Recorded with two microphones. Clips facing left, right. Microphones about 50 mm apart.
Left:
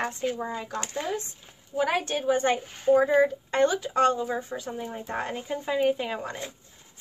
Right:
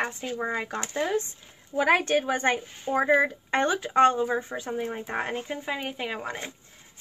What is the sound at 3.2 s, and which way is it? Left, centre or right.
Speech, right.